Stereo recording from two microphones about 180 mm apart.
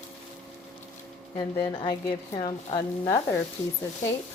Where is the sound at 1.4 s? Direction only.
25° left (ahead or behind).